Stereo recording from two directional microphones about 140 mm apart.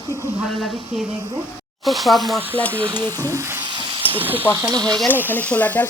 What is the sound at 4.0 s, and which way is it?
Speech, 15° right (ahead or behind).